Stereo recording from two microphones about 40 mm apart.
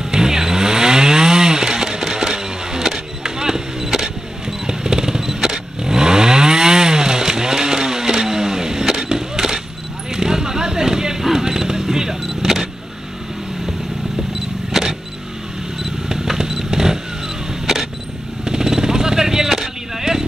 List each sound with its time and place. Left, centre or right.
0.1 s chainsaw: centre
10.1 s a sound: centre
14.7 s power windows: centre
15.8 s vehicle: centre
18.4 s vehicle: centre